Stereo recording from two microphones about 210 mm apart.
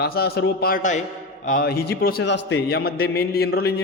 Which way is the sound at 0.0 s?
50° left (ahead or behind).